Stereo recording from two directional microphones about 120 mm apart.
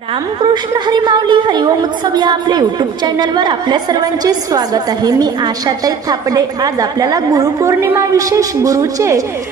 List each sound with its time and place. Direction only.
0.4 s a woman's voice: 40° right (ahead or behind)